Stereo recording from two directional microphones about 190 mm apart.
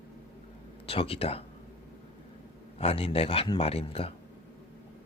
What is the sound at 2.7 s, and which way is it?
A man's voice, 30° left (ahead or behind).